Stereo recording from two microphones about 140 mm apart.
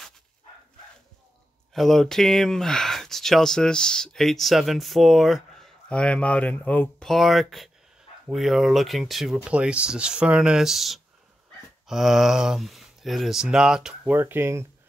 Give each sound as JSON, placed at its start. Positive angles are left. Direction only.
{"t": 1.7, "sound": "speech", "side_deg": 0}
{"t": 14.1, "sound": "speech", "side_deg": -15}